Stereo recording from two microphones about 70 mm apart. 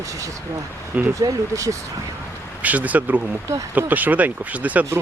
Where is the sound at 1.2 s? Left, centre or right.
Right.